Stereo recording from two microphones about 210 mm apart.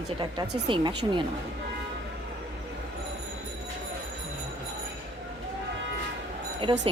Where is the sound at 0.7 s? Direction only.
25° right (ahead or behind).